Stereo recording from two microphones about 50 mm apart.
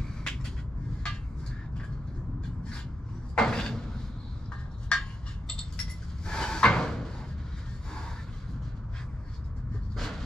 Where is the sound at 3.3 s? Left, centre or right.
Centre.